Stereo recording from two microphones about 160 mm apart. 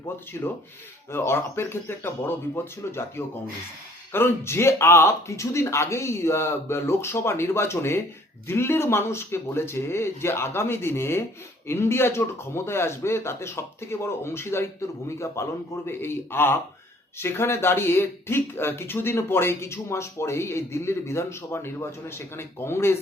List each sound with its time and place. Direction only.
0.3 s rub: 20° left (ahead or behind)
1.1 s speech: 15° left (ahead or behind)
4.1 s speech: 15° left (ahead or behind)